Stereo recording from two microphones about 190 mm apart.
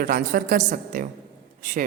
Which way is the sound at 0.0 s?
50° right (ahead or behind).